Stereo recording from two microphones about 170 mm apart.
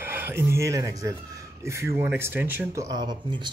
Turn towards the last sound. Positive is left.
turn(degrees=-25)  # may be behind; listen again after turning